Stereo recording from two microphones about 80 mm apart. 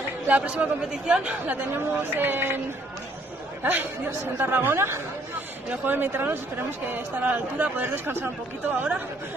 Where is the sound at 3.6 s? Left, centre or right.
Right.